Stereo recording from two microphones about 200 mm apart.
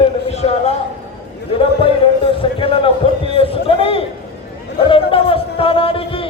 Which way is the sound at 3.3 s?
30° left (ahead or behind).